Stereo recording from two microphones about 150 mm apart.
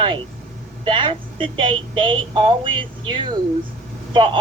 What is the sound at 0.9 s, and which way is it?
Speech, 35° right (ahead or behind).